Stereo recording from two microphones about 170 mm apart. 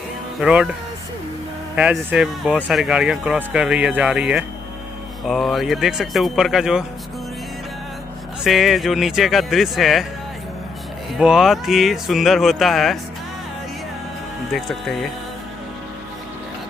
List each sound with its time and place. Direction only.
0.4 s speech: 5° right (ahead or behind)
1.8 s speech: 5° right (ahead or behind)
8.5 s speech: centre (ahead or behind)
11.1 s speech: 5° right (ahead or behind)
14.5 s speech: centre (ahead or behind)